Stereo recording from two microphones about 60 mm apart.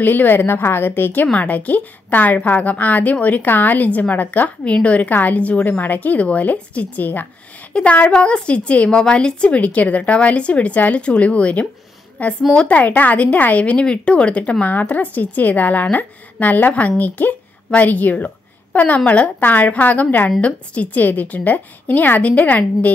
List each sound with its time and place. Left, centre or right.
0.0 s a woman's voice: left